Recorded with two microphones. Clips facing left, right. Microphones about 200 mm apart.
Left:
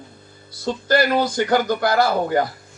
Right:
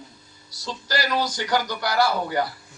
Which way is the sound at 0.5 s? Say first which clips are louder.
Left 10 dB; 55° left (ahead or behind).